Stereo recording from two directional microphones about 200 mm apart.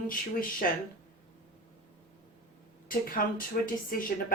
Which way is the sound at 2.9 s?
45° left (ahead or behind).